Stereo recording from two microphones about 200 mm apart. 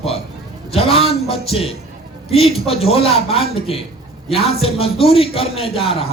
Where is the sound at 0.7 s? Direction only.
30° left (ahead or behind).